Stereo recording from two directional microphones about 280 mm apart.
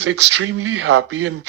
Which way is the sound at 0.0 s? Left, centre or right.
Right.